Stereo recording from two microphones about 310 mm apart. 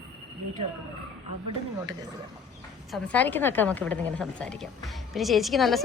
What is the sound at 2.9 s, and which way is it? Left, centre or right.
A woman's voice, centre.